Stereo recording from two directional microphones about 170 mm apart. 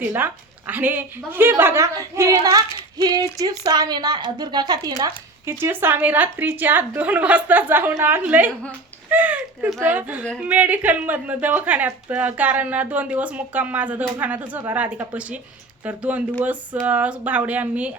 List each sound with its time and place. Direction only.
0.7 s a woman's voice: 10° right (ahead or behind)